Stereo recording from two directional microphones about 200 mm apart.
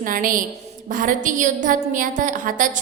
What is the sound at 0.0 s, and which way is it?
A woman's voice, 45° right (ahead or behind).